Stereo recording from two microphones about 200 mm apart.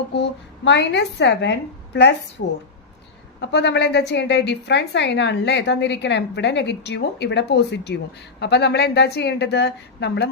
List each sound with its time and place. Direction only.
0.1 s a woman's voice: 60° left (ahead or behind)
3.5 s a woman's voice: 60° left (ahead or behind)